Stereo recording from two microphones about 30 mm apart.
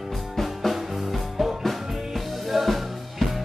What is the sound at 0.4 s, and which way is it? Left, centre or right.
Music, centre.